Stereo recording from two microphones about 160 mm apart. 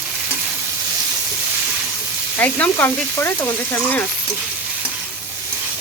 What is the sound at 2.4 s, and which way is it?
Speech, 10° left (ahead or behind).